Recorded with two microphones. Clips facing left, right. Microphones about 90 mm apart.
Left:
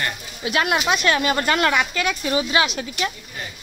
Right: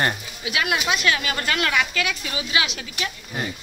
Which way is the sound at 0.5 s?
45° left (ahead or behind).